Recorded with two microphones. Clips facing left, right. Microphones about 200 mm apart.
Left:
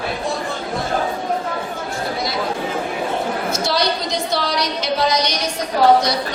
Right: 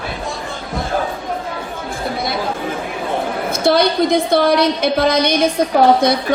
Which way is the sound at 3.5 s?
55° right (ahead or behind).